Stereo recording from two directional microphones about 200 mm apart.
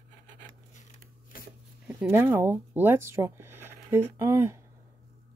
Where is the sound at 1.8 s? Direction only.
5° right (ahead or behind).